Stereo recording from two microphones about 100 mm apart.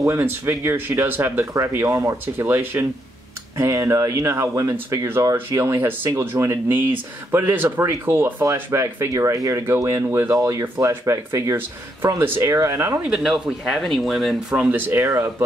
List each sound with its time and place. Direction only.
0.0 s speech: 25° right (ahead or behind)
13.0 s speech: 5° right (ahead or behind)
14.5 s speech: 15° right (ahead or behind)